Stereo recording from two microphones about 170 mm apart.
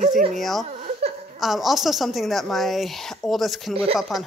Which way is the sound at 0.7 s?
40° right (ahead or behind).